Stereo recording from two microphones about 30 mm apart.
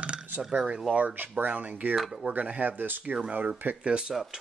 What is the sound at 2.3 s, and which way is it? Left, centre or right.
Speech, right.